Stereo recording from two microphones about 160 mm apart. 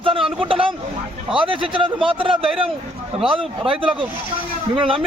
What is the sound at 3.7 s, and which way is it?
Speech, 5° right (ahead or behind).